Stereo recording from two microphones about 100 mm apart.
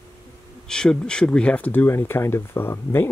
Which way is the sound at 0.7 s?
10° left (ahead or behind).